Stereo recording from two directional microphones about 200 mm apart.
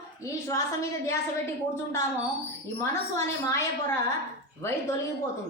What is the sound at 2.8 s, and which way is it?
A woman's voice, 15° left (ahead or behind).